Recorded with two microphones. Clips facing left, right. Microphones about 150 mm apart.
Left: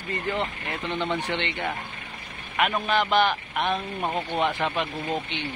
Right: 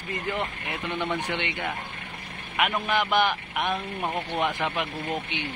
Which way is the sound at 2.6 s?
10° right (ahead or behind).